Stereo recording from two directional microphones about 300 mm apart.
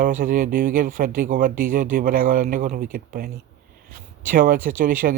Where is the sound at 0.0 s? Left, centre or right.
Right.